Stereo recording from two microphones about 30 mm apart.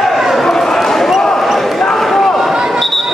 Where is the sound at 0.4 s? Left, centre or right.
Centre.